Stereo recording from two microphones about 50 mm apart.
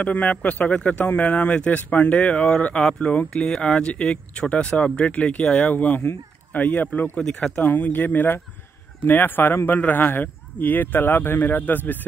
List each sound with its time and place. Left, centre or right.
0.0 s speech: left
2.8 s speech: centre
3.1 s speech: left
7.4 s speech: left
7.9 s speech: left